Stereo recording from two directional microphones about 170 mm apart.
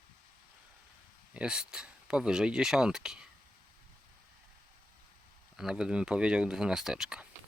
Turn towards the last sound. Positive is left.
turn(degrees=-5)  # may be behind; listen again after turning